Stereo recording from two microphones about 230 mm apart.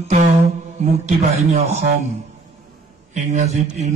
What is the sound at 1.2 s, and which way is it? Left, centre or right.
Speech, right.